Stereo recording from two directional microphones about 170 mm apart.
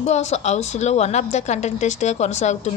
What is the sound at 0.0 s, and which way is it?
Speech, 40° left (ahead or behind).